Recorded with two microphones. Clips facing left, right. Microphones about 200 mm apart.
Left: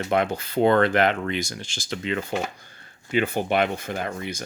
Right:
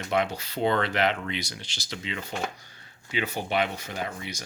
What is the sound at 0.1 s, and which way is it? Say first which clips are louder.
Speech: left 3 dB; 50° left (ahead or behind).